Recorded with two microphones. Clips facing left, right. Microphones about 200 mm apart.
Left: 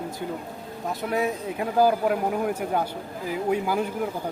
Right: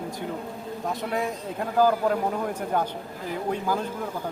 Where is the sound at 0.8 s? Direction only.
5° left (ahead or behind).